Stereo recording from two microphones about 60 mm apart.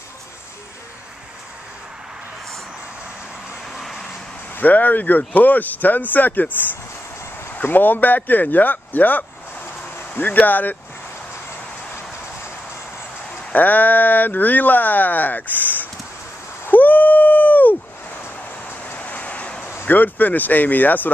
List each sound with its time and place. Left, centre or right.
3.7 s vehicle: centre
4.6 s speech: left
13.5 s speech: left
16.6 s a sound: left
18.9 s vehicle: left
19.9 s speech: left